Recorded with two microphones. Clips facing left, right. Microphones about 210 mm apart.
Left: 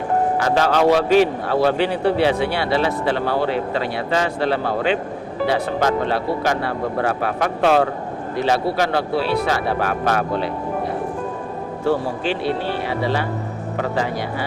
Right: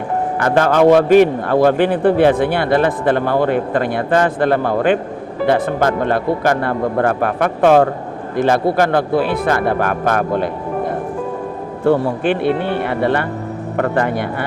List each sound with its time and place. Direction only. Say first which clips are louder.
0.3 s a man's voice: right 7 dB; 55° right (ahead or behind)